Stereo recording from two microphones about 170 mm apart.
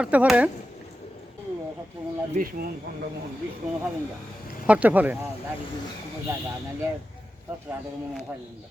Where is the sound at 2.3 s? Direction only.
55° right (ahead or behind).